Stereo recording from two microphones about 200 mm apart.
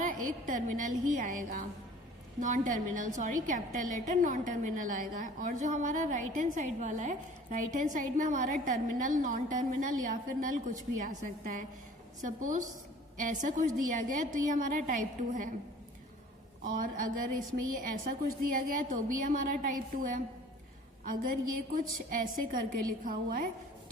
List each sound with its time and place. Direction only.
0.0 s a woman's voice: 40° right (ahead or behind)
13.1 s a woman's voice: 40° right (ahead or behind)
16.6 s a woman's voice: 45° right (ahead or behind)
21.7 s a woman's voice: 45° right (ahead or behind)